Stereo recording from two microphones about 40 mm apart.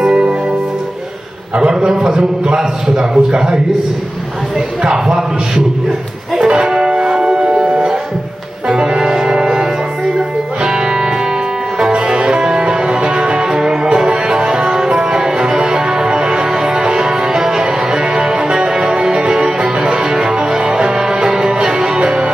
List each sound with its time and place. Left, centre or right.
0.0 s music: right
1.6 s a man's voice: centre
4.8 s a man's voice: centre
6.4 s music: right